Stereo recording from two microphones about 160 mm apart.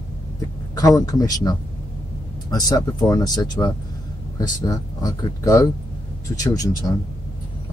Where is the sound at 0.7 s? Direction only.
20° left (ahead or behind).